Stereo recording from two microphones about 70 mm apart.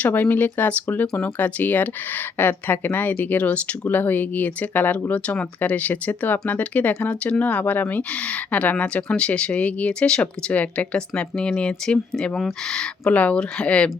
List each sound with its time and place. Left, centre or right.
0.0 s speech: left